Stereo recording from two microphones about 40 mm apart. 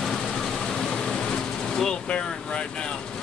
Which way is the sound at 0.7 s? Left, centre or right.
Centre.